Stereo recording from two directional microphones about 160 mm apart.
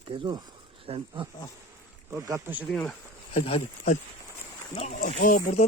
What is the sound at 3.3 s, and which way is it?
Speech, 45° left (ahead or behind).